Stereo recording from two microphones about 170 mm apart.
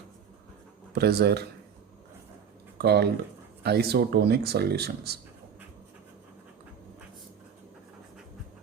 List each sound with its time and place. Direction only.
0.9 s speech: 70° right (ahead or behind)
2.7 s speech: 70° right (ahead or behind)